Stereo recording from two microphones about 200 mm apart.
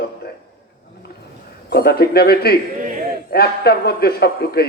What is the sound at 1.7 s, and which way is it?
A man's voice, 50° left (ahead or behind).